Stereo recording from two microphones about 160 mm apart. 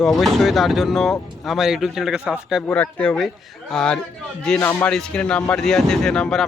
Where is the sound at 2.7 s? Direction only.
10° left (ahead or behind).